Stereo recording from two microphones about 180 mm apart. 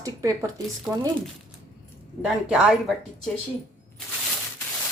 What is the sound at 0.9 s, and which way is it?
Speech, 5° right (ahead or behind).